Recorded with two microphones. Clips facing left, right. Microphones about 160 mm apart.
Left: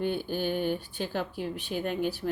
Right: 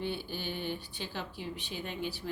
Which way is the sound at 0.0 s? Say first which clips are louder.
Left 7 dB; 50° left (ahead or behind).